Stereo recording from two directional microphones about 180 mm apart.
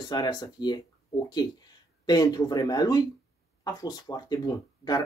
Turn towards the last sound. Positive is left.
turn(degrees=20)  # may be behind; listen again after turning